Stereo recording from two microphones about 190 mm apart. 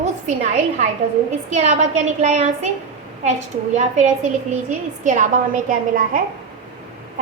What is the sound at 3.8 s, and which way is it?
Speech, 40° right (ahead or behind).